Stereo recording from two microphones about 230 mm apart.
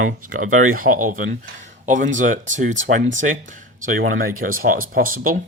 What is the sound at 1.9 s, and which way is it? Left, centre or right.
Speech, right.